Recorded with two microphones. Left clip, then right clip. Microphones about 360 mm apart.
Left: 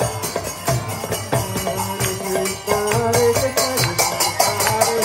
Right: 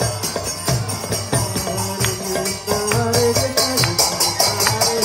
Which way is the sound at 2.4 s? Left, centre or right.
Left.